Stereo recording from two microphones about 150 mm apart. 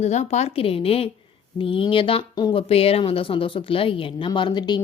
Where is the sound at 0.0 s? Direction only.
50° left (ahead or behind).